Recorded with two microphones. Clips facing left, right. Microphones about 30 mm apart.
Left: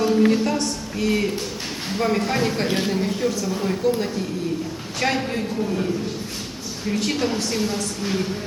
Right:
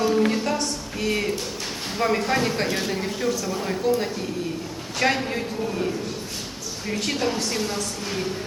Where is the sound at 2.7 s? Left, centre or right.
Left.